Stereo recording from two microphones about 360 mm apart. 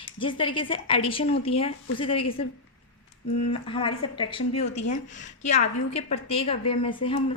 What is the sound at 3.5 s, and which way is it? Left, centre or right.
A woman's voice, centre.